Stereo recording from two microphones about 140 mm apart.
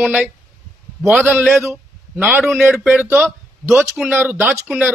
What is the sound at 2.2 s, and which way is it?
A man's voice, 5° right (ahead or behind).